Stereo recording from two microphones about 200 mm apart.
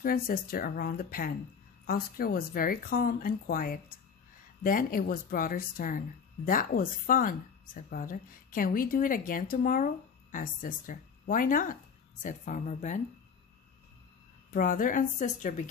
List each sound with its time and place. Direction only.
0.0 s a woman's voice: 45° left (ahead or behind)
14.5 s a woman's voice: 40° left (ahead or behind)